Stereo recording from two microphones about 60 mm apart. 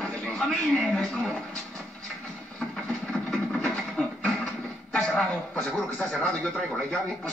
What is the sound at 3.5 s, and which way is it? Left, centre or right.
Television, centre.